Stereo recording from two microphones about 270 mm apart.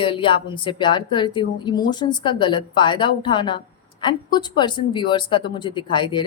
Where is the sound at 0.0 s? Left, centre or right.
Centre.